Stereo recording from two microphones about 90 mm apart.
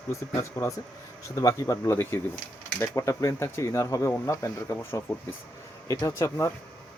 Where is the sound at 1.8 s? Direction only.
25° left (ahead or behind).